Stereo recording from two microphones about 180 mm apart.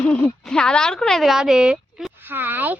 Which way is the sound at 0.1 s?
5° left (ahead or behind).